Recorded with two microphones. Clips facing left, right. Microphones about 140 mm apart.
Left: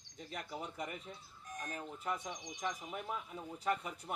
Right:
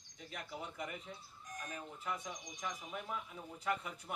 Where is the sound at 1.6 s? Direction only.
35° left (ahead or behind).